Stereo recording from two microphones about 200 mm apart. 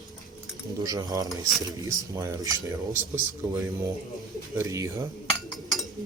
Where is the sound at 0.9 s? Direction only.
20° right (ahead or behind).